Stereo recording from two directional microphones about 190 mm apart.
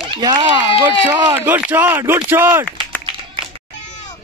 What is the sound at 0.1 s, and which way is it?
Speech, 25° right (ahead or behind).